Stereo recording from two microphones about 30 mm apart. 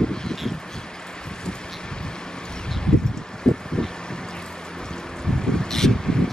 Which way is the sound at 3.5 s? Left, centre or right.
Left.